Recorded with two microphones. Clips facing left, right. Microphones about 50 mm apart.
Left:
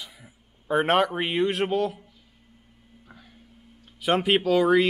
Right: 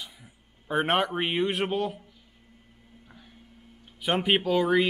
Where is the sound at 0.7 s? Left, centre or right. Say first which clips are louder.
Left 4 dB; centre.